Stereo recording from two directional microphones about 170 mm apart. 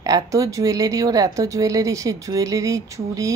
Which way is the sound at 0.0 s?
20° right (ahead or behind).